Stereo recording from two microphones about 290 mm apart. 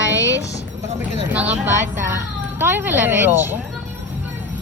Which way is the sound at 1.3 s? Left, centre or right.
Centre.